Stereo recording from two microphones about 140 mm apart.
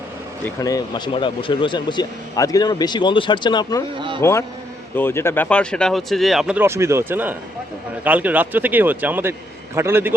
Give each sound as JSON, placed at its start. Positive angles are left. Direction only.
{"t": 0.6, "sound": "speech", "side_deg": 30}
{"t": 3.9, "sound": "speech", "side_deg": -35}
{"t": 4.2, "sound": "speech", "side_deg": 20}
{"t": 6.6, "sound": "speech", "side_deg": -20}